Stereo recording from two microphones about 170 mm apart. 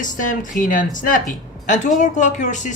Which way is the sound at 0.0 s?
50° left (ahead or behind).